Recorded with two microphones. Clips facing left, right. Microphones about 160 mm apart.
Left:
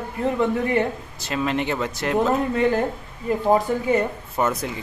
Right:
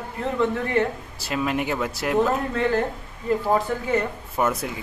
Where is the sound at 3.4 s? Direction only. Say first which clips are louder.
Left 4 dB; 15° left (ahead or behind).